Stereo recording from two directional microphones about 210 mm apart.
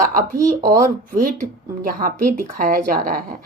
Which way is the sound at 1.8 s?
40° right (ahead or behind).